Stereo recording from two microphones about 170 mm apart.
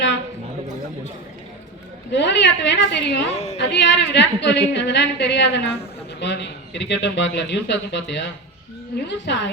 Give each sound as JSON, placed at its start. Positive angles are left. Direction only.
{"t": 2.1, "sound": "a man's voice", "side_deg": 90}
{"t": 3.3, "sound": "a woman's voice", "side_deg": 40}
{"t": 3.6, "sound": "a man's voice", "side_deg": 85}